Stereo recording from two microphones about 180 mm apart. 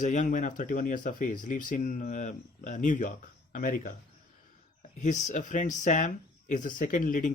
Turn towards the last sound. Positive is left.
turn(degrees=50)  # may be behind; listen again after turning